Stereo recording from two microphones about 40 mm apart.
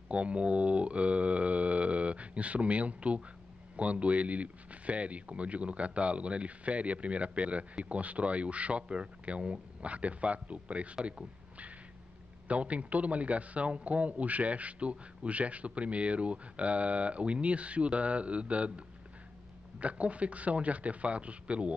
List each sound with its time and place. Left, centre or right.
0.1 s a man's voice: right
11.1 s a sound: right
12.4 s a man's voice: right
19.8 s a man's voice: right